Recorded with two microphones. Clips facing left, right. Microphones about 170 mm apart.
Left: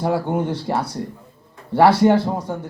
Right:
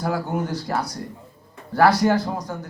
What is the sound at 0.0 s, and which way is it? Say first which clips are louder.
A man's voice: left 4 dB; 30° left (ahead or behind).